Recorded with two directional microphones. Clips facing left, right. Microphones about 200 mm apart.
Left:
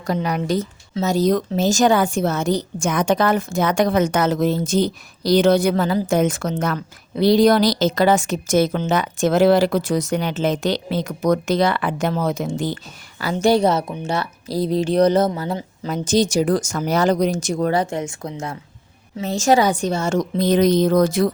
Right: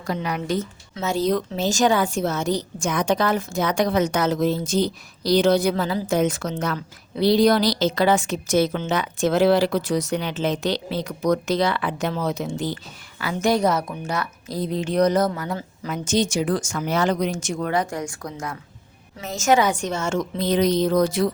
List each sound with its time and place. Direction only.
0.1 s a woman's voice: 40° left (ahead or behind)